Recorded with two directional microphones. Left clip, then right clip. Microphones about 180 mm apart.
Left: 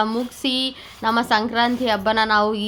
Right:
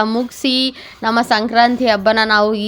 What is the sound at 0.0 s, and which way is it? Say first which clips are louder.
A woman's voice: right 5 dB; 30° right (ahead or behind).